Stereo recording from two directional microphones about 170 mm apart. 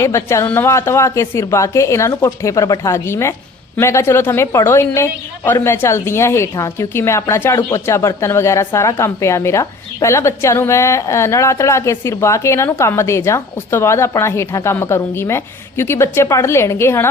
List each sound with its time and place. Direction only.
0.0 s a woman's voice: 15° left (ahead or behind)